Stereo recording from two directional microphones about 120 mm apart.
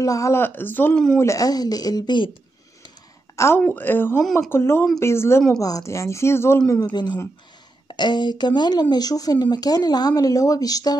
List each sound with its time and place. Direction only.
0.0 s speech: 30° left (ahead or behind); by 1.1 s 10° left (ahead or behind)
1.1 s speech: 25° left (ahead or behind)
3.3 s speech: 20° left (ahead or behind)
6.7 s speech: 35° left (ahead or behind)